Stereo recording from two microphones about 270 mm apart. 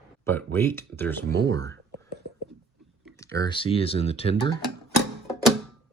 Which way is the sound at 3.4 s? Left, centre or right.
Centre.